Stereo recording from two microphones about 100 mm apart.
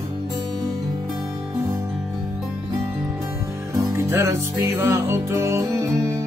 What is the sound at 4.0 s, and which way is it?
Music, 25° right (ahead or behind).